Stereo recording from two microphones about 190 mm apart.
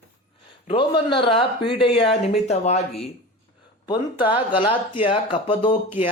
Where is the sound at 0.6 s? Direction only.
25° left (ahead or behind).